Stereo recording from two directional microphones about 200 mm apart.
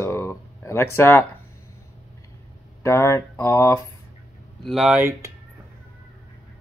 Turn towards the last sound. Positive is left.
turn(degrees=-10)  # may be behind; listen again after turning